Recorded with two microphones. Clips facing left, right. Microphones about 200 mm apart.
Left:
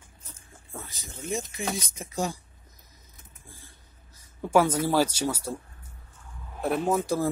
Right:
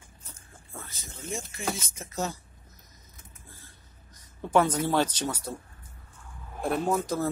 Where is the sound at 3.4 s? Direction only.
10° left (ahead or behind).